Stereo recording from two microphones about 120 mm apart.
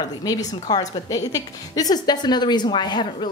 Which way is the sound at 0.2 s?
30° left (ahead or behind).